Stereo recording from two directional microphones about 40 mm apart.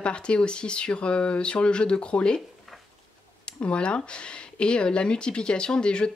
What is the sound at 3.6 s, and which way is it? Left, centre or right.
A woman's voice, left.